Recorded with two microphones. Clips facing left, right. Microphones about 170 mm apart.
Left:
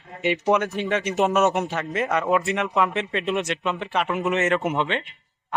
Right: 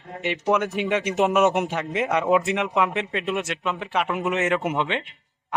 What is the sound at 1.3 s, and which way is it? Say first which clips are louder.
Speech: right 1 dB; 20° right (ahead or behind).